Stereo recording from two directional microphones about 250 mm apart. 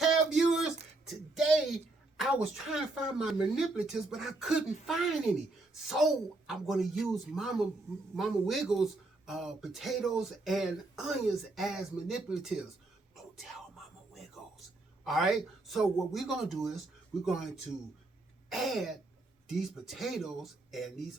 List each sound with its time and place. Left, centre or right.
0.0 s a sound: centre
1.1 s a woman's voice: centre
13.3 s music: centre
15.0 s speech: centre